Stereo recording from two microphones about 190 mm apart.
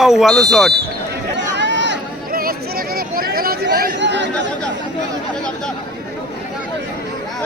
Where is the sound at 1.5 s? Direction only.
70° right (ahead or behind).